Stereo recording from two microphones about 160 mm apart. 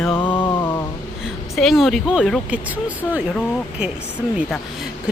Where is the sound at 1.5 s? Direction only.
Centre (ahead or behind).